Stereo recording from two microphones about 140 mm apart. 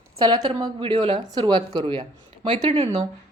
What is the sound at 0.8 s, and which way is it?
A woman's voice, 40° right (ahead or behind).